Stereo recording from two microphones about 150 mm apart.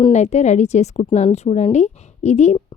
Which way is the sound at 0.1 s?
50° left (ahead or behind).